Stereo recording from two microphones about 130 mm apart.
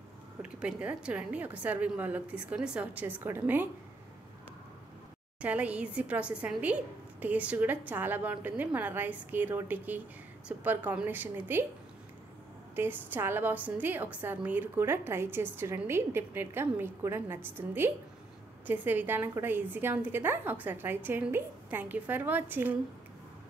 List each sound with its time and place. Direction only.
0.4 s a woman's voice: 10° right (ahead or behind)
5.4 s a woman's voice: 10° right (ahead or behind)
12.7 s a woman's voice: 15° right (ahead or behind)